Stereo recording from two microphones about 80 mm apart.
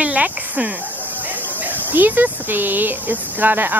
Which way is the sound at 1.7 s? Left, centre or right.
Right.